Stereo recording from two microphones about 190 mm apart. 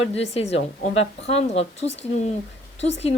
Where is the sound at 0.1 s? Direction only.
30° left (ahead or behind).